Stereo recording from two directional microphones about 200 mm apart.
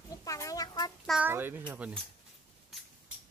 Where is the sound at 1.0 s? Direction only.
5° right (ahead or behind).